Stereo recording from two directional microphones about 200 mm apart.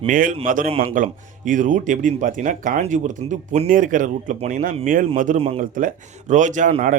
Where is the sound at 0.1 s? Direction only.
40° right (ahead or behind).